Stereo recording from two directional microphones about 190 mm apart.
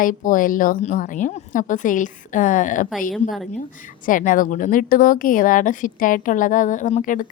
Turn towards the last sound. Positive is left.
turn(degrees=45)  # may be behind; listen again after turning